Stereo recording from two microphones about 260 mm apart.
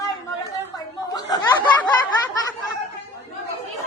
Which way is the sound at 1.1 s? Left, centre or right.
Centre.